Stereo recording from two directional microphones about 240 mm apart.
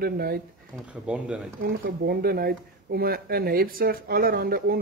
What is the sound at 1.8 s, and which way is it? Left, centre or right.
Speech, right.